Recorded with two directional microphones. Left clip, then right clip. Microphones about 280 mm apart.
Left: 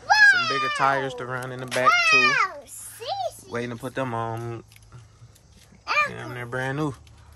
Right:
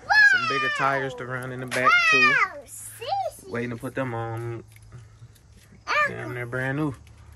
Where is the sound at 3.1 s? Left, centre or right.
Centre.